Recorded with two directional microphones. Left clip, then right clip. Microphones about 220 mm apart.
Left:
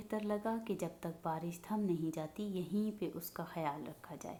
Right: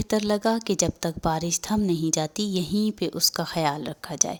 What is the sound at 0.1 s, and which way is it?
A woman's voice, 50° right (ahead or behind).